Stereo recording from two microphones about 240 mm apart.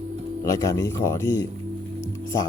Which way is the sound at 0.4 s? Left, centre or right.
Centre.